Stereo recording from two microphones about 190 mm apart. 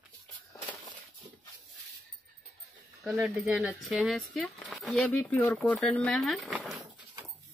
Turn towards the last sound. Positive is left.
turn(degrees=0)  # may be behind; listen again after turning